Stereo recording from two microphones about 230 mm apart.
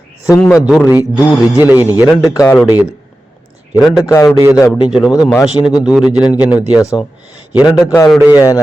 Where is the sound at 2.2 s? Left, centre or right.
Centre.